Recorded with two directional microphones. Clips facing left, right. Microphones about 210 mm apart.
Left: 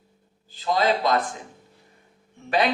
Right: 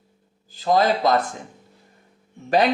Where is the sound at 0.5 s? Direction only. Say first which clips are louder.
Right 3 dB; 45° right (ahead or behind).